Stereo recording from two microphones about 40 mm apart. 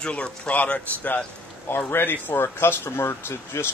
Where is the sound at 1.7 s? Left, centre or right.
Left.